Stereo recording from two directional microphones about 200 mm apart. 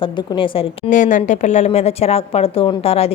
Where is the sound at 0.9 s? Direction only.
40° left (ahead or behind).